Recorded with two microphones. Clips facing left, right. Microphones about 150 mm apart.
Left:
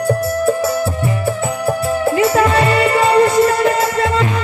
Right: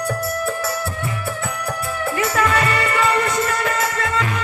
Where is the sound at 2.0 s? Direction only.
30° left (ahead or behind).